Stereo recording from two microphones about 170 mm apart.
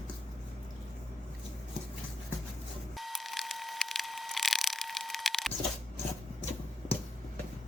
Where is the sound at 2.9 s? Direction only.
Centre (ahead or behind).